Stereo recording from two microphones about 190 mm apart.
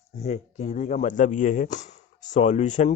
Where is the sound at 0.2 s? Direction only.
35° left (ahead or behind).